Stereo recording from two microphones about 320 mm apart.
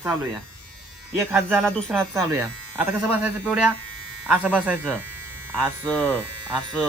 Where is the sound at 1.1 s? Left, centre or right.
Centre.